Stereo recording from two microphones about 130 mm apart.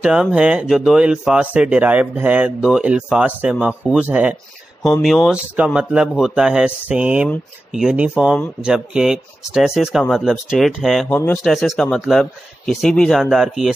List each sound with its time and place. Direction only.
0.0 s speech: 5° right (ahead or behind)
11.1 s speech: 15° left (ahead or behind)
11.4 s speech: centre (ahead or behind)